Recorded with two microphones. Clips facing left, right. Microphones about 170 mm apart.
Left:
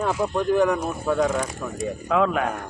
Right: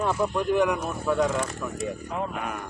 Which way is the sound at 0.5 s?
35° left (ahead or behind).